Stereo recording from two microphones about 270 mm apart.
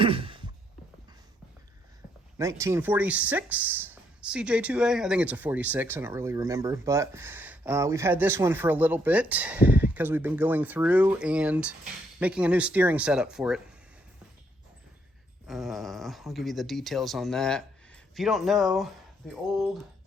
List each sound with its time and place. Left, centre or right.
0.0 s a sound: centre
2.4 s speech: centre
15.4 s speech: centre